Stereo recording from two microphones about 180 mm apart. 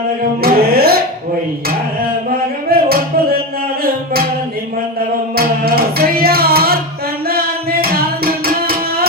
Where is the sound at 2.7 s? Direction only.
55° right (ahead or behind).